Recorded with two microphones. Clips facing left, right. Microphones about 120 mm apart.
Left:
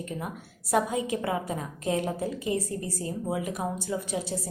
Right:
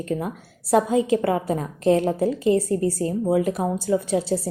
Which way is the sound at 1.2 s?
50° right (ahead or behind).